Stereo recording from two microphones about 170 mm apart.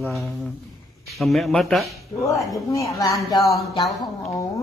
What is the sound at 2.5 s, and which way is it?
Speech, 20° left (ahead or behind).